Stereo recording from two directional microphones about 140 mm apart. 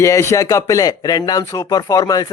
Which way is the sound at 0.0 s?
20° left (ahead or behind).